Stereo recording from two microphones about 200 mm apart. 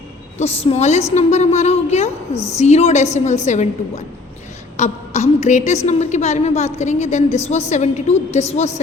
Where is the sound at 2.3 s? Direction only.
15° left (ahead or behind).